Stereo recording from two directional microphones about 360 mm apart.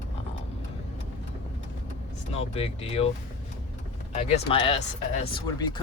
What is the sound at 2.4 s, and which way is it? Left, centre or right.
Speech, centre.